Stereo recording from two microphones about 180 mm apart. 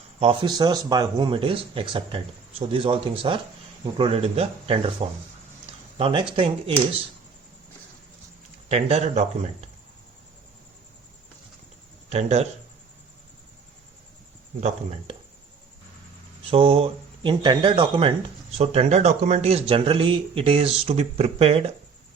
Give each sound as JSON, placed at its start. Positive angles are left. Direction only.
{"t": 0.2, "sound": "speech", "side_deg": -25}
{"t": 8.7, "sound": "speech", "side_deg": -35}
{"t": 12.0, "sound": "speech", "side_deg": -35}
{"t": 14.6, "sound": "speech", "side_deg": -35}
{"t": 16.5, "sound": "speech", "side_deg": -30}